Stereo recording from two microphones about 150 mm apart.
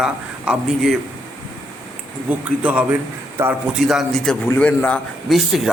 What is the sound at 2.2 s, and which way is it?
A man's voice, 10° right (ahead or behind).